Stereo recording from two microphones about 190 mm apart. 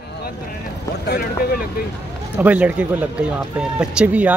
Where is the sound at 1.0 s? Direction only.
60° left (ahead or behind).